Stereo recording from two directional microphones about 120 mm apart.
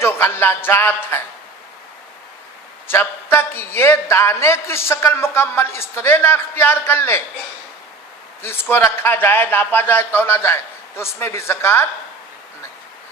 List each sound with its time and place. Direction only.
0.0 s a man's voice: 20° left (ahead or behind)
2.8 s a man's voice: 20° left (ahead or behind)
8.4 s a man's voice: 20° left (ahead or behind)